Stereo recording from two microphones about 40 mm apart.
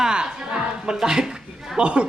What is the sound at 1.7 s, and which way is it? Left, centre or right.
Speech, right.